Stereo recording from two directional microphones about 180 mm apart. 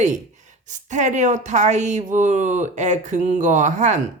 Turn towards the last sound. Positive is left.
turn(degrees=-45)  # may be behind; listen again after turning